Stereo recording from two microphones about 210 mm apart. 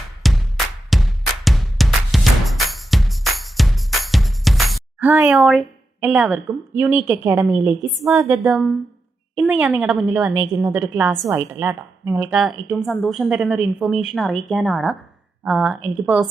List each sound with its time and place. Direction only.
0.2 s music: centre (ahead or behind)
7.5 s a woman's voice: 20° left (ahead or behind)
8.0 s a woman's voice: 15° right (ahead or behind)
8.4 s a woman's voice: centre (ahead or behind)
10.3 s a woman's voice: 15° right (ahead or behind)